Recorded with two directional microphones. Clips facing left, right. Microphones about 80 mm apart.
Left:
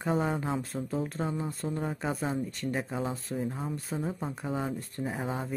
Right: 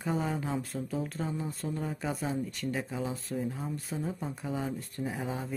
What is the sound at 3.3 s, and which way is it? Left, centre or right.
Speech, left.